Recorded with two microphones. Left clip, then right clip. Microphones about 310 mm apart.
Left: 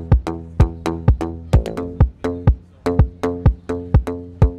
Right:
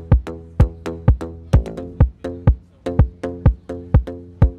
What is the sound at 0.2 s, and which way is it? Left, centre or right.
Music, left.